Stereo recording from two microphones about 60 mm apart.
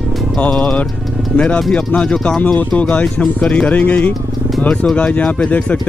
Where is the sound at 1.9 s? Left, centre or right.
Left.